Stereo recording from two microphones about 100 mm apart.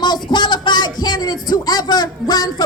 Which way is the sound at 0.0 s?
45° left (ahead or behind).